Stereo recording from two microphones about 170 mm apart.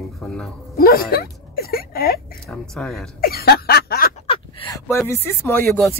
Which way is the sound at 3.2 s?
65° left (ahead or behind).